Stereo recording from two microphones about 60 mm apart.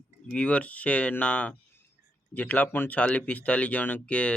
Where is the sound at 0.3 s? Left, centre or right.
Centre.